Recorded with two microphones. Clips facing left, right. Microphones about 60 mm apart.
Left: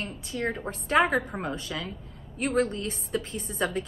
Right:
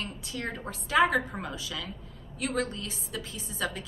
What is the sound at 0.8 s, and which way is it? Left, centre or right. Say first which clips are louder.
A woman's voice: left 1 dB; left.